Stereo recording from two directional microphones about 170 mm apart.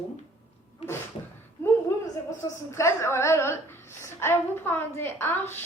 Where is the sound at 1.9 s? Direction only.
15° left (ahead or behind).